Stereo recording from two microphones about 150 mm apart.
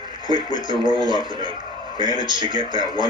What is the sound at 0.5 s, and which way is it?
Speech, 30° right (ahead or behind).